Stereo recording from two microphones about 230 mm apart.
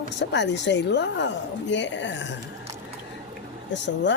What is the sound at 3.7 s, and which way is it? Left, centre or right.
Speech, left.